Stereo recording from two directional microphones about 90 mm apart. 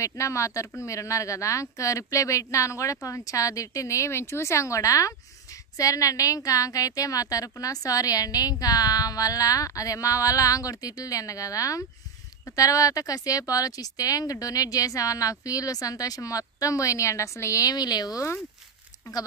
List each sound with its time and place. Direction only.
0.0 s speech: 35° left (ahead or behind)